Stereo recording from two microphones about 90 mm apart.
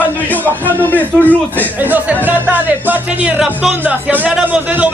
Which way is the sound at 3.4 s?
5° right (ahead or behind).